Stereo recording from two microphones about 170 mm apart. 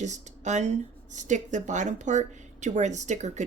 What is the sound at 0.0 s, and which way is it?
Speech, 45° right (ahead or behind).